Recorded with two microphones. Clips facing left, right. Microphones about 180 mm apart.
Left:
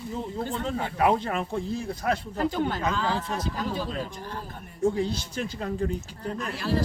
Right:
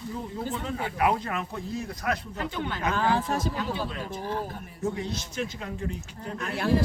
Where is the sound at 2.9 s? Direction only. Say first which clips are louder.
Right 3 dB; 55° right (ahead or behind).